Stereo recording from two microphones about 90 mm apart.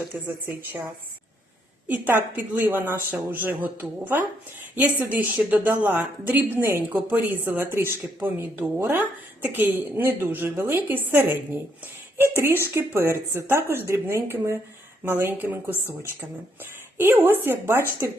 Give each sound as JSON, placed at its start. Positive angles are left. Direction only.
{"t": 0.1, "sound": "speech", "side_deg": -25}
{"t": 1.9, "sound": "speech", "side_deg": -20}
{"t": 17.0, "sound": "speech", "side_deg": -25}